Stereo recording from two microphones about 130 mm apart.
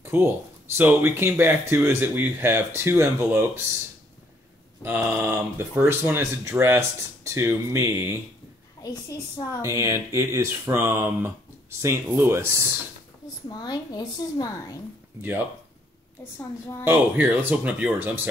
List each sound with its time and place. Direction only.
0.0 s speech: 20° right (ahead or behind)
4.8 s speech: 15° right (ahead or behind)
9.6 s speech: 20° right (ahead or behind)
13.5 s a woman's voice: 30° left (ahead or behind)
16.3 s a woman's voice: 20° left (ahead or behind)
16.8 s speech: 15° right (ahead or behind)